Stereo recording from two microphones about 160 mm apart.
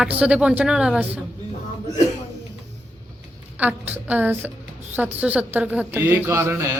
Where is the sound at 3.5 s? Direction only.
10° right (ahead or behind).